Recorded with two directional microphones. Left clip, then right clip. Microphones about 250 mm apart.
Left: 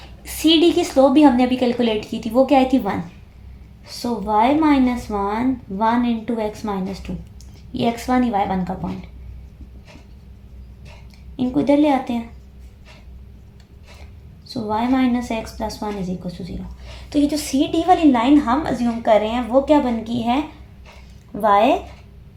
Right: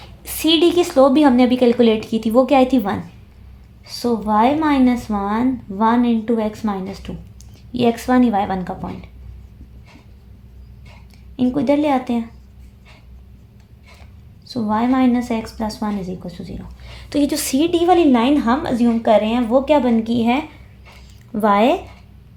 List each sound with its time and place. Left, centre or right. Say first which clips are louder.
0.3 s a woman's voice: even; right
11.3 s a woman's voice: even; right
14.5 s a woman's voice: right 2 dB; right
21.4 s a woman's voice: even; right